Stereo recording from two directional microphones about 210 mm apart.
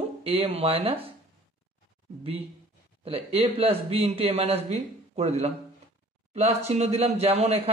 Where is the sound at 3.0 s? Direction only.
25° right (ahead or behind).